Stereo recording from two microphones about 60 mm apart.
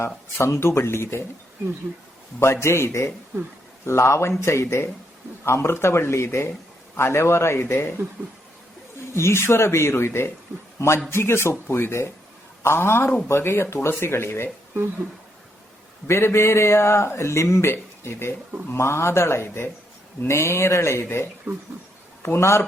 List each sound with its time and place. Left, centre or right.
0.0 s a man's voice: left
2.4 s a man's voice: left
9.1 s a man's voice: left
16.0 s a man's voice: left
21.5 s speech: right
22.2 s a man's voice: left